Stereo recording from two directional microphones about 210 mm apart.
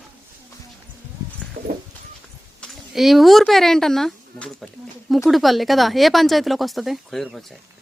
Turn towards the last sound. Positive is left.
turn(degrees=0)  # may be behind; listen again after turning